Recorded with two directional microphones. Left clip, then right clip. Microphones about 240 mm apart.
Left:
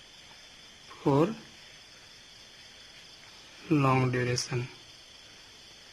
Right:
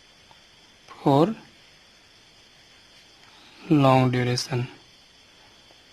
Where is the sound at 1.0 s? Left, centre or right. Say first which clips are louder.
Right 6 dB; right.